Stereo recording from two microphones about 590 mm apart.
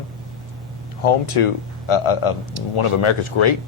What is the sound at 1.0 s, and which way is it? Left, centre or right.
Speech, left.